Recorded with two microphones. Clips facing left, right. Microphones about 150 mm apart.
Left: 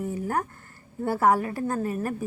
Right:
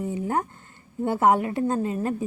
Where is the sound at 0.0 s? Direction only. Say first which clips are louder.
Right 2 dB; 20° right (ahead or behind).